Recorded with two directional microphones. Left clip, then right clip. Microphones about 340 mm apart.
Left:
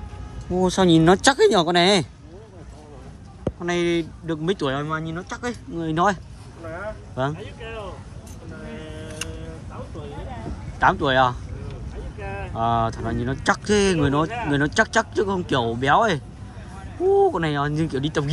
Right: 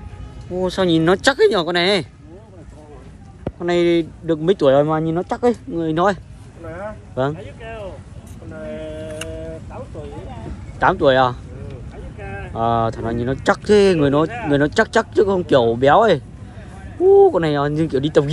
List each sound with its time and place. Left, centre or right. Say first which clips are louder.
0.6 s speech: even; centre
3.5 s speech: right 7 dB; centre
7.3 s speech: right 2 dB; centre
10.8 s speech: right 4 dB; centre
12.2 s a sound: even; centre
12.5 s speech: right 4 dB; centre